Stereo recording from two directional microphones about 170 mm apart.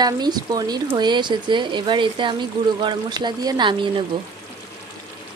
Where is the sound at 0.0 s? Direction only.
25° right (ahead or behind).